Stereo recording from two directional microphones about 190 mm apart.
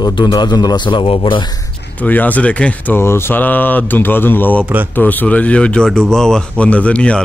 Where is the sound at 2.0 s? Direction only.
10° left (ahead or behind).